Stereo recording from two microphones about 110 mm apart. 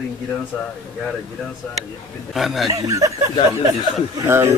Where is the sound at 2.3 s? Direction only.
Centre (ahead or behind).